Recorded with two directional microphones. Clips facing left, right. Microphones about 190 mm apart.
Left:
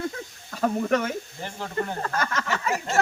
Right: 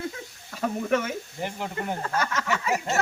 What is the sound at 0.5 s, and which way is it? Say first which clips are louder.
Speech: left 2 dB; 45° left (ahead or behind).